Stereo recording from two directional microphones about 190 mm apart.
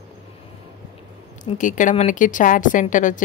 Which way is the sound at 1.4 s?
40° left (ahead or behind).